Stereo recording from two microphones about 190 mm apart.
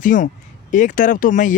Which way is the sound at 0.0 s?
45° left (ahead or behind).